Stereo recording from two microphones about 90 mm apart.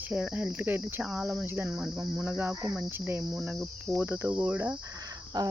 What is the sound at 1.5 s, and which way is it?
Cricket, 25° right (ahead or behind).